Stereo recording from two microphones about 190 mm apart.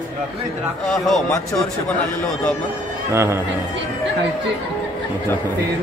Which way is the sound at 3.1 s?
15° right (ahead or behind).